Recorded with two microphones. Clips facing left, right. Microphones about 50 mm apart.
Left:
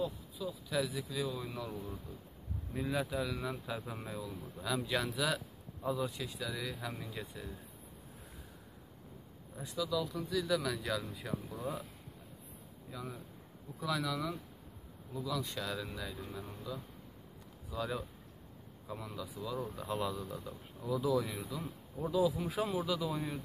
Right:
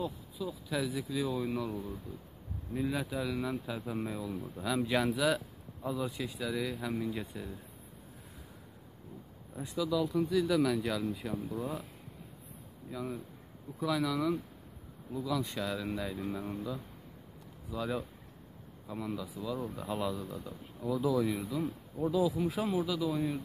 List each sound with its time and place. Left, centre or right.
0.0 s speech: centre
9.6 s a man's voice: centre
10.5 s speech: centre
12.9 s a man's voice: centre
17.6 s speech: centre
19.1 s speech: centre
21.6 s speech: centre